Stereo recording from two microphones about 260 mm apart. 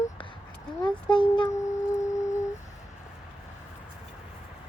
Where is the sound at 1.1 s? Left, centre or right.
Centre.